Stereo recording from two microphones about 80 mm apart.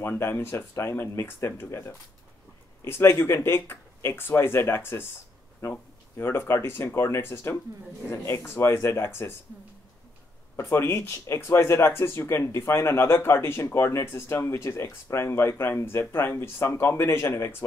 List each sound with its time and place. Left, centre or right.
0.0 s speech: left
10.5 s speech: left